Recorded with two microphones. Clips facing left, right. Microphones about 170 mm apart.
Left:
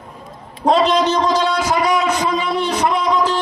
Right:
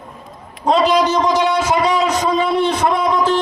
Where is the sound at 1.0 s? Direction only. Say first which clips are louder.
Right 1 dB; 20° right (ahead or behind).